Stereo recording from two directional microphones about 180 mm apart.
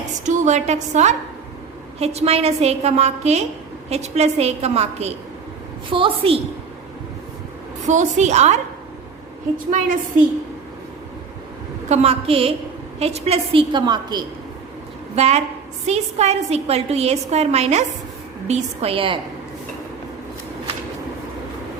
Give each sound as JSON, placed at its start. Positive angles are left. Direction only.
{"t": 0.3, "sound": "a woman's voice", "side_deg": -40}
{"t": 7.9, "sound": "a woman's voice", "side_deg": -40}
{"t": 11.9, "sound": "a woman's voice", "side_deg": -35}
{"t": 15.1, "sound": "a woman's voice", "side_deg": -35}